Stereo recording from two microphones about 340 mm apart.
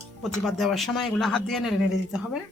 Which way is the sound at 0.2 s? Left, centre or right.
Centre.